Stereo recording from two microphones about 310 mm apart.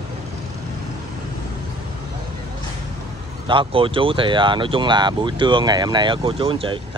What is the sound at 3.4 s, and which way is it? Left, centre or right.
Speech, centre.